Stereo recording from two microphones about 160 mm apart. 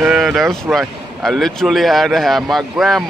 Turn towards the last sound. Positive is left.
turn(degrees=0)  # may be behind; listen again after turning